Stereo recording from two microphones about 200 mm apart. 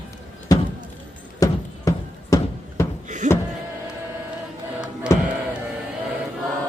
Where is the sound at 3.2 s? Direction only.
35° right (ahead or behind).